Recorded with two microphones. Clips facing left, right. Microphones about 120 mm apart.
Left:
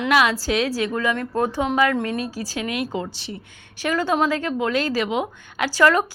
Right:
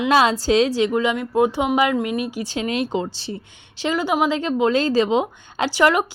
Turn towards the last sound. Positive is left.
turn(degrees=-15)  # may be behind; listen again after turning